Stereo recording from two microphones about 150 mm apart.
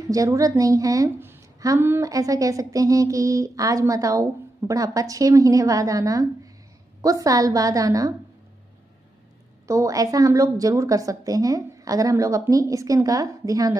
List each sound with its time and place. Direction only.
0.1 s a woman's voice: 25° right (ahead or behind)
9.7 s a woman's voice: 20° right (ahead or behind)